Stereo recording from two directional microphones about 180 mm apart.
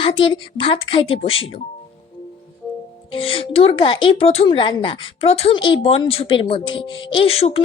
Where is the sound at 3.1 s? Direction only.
30° left (ahead or behind).